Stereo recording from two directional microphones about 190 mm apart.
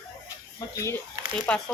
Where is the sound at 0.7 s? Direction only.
15° left (ahead or behind).